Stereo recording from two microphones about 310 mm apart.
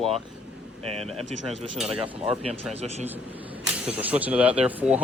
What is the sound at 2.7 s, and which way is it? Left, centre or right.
Speech, right.